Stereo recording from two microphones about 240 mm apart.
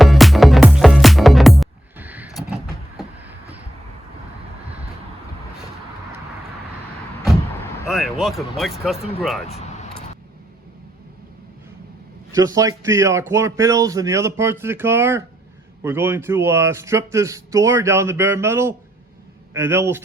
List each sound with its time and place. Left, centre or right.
0.0 s music: centre
7.3 s vehicle: centre
8.2 s speech: centre
9.5 s vehicle: left
12.3 s speech: centre